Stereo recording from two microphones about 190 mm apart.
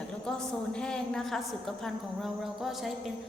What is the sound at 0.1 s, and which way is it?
A woman's voice, 5° left (ahead or behind).